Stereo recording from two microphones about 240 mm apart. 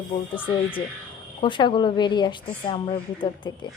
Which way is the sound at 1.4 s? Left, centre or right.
Centre.